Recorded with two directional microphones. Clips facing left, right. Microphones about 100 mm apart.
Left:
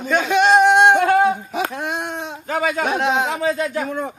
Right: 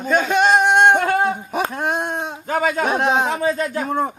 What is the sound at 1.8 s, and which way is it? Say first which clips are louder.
Speech: right 3 dB; 45° right (ahead or behind).